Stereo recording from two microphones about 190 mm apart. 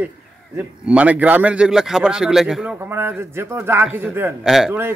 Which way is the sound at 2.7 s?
15° right (ahead or behind).